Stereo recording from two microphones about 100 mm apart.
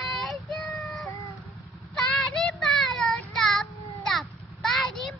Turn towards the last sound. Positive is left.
turn(degrees=0)  # may be behind; listen again after turning